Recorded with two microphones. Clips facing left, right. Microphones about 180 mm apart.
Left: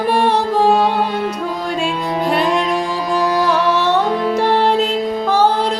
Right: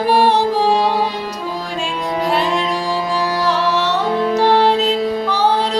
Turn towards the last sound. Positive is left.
turn(degrees=50)  # may be behind; listen again after turning